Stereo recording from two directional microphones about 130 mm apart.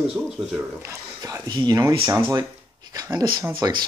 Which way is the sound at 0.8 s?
25° right (ahead or behind).